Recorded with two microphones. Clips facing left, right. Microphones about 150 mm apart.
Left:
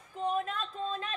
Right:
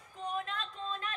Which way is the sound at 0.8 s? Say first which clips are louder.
Left 3 dB; 30° left (ahead or behind).